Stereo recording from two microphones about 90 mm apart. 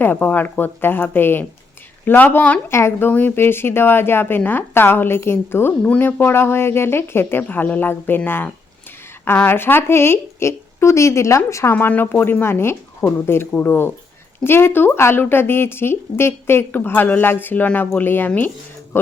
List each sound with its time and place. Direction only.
0.0 s speech: 20° left (ahead or behind)
2.6 s speech: 30° left (ahead or behind)
11.7 s speech: 20° left (ahead or behind)